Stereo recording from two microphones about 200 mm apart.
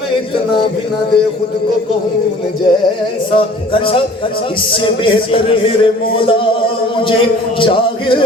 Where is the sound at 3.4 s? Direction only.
25° left (ahead or behind).